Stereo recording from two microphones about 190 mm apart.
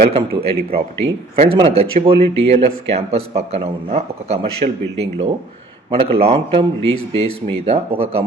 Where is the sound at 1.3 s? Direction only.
35° right (ahead or behind).